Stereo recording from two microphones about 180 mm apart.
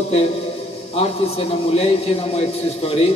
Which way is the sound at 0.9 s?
35° left (ahead or behind).